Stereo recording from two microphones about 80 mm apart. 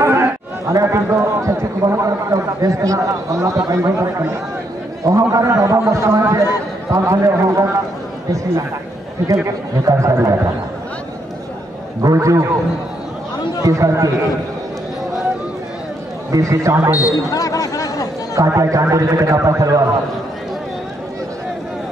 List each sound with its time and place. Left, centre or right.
0.0 s a sound: right
0.8 s a man's voice: right
9.8 s a man's voice: right
12.0 s a man's voice: right
13.7 s a man's voice: right
16.3 s a man's voice: right
17.1 s a sound: left
18.3 s a man's voice: right